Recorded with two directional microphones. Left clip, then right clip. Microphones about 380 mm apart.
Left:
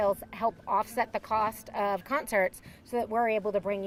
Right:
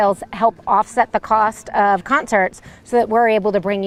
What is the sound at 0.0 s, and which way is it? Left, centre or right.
Speech, right.